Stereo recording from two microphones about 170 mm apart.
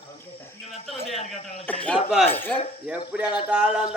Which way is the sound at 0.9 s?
Centre (ahead or behind).